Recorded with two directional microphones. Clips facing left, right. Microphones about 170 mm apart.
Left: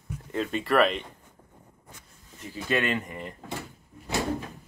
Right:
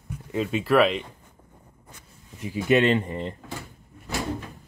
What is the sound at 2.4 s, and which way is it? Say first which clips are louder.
Speech: right 8 dB; 10° right (ahead or behind).